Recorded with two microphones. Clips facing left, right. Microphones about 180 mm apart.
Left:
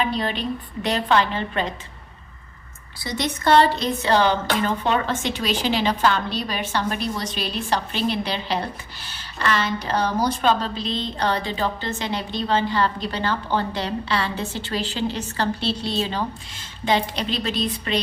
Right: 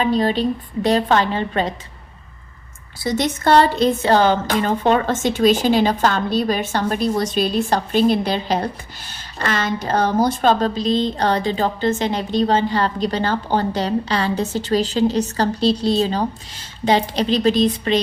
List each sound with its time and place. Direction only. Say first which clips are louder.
0.0 s a woman's voice: right 7 dB; 40° right (ahead or behind)
3.0 s a woman's voice: right 5 dB; 45° right (ahead or behind)